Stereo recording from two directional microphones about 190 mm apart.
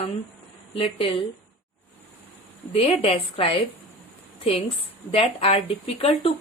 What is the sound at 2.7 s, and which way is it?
A woman's voice, 35° left (ahead or behind).